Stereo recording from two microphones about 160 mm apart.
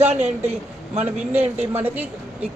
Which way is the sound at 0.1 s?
45° right (ahead or behind).